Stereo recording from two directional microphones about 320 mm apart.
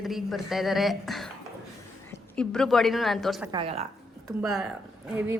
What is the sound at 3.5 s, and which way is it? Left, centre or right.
Speech, centre.